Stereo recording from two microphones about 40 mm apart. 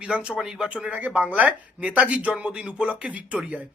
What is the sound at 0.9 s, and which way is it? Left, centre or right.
Speech, right.